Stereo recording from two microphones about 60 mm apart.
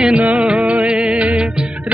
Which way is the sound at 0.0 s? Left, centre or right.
Right.